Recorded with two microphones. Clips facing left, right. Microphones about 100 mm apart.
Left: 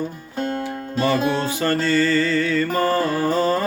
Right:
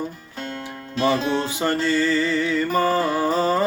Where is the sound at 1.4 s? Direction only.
20° right (ahead or behind).